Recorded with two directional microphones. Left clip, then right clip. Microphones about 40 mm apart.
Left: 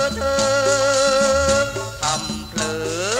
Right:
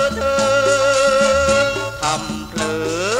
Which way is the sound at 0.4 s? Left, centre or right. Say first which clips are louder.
Right 2 dB; right.